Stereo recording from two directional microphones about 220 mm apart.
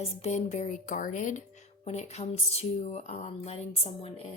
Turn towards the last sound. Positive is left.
turn(degrees=25)  # may be behind; listen again after turning